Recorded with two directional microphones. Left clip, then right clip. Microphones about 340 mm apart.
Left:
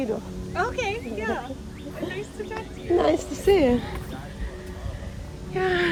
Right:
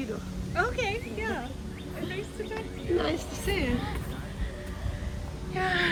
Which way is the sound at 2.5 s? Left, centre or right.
Centre.